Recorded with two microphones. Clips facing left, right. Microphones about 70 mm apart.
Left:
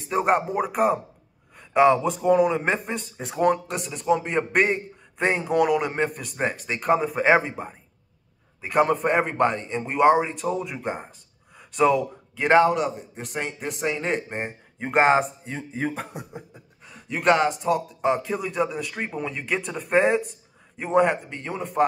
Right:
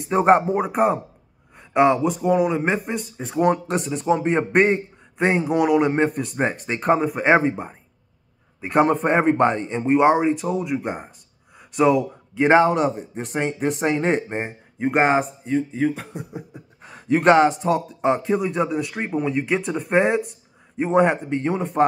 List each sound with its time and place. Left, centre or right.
0.1 s speech: right
1.6 s a man's voice: centre
3.6 s speech: right
7.1 s a man's voice: centre
8.5 s speech: right
11.5 s a sound: centre
12.0 s a man's voice: right
12.6 s speech: right
14.8 s speech: centre
16.2 s speech: centre
16.8 s speech: right